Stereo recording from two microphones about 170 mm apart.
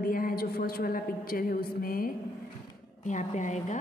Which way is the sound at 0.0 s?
55° left (ahead or behind).